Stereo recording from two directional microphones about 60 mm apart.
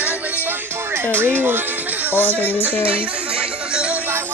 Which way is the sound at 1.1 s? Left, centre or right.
Right.